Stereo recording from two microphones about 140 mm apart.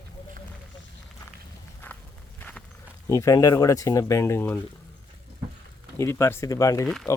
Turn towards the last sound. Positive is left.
turn(degrees=20)  # may be behind; listen again after turning